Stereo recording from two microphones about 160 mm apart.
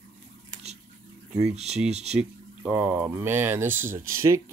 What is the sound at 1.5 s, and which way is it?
Speech, 40° right (ahead or behind).